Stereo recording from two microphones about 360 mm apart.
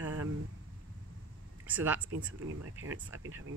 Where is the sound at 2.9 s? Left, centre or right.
Centre.